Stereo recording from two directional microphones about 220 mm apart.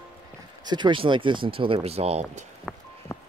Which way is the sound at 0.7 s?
20° right (ahead or behind).